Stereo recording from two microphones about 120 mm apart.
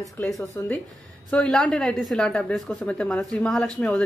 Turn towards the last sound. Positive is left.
turn(degrees=5)  # may be behind; listen again after turning